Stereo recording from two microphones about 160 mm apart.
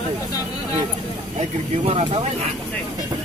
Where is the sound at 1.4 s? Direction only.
45° right (ahead or behind).